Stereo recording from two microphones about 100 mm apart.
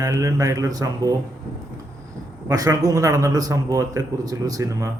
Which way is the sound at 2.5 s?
35° right (ahead or behind).